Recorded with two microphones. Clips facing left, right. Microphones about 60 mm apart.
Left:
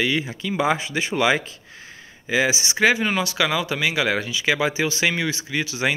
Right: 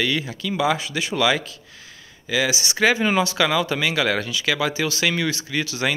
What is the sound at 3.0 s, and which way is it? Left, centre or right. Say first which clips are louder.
Speech: right 2 dB; centre.